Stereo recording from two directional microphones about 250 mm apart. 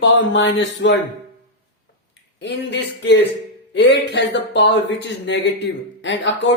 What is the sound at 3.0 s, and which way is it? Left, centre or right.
Speech, left.